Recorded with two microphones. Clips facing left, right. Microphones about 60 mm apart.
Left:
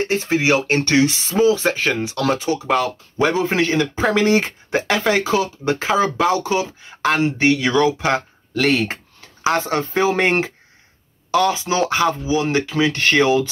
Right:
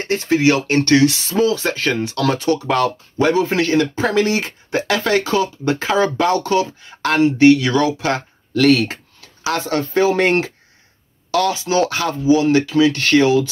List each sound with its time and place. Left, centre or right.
0.1 s speech: left